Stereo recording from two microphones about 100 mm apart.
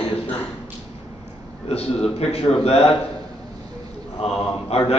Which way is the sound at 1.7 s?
90° left.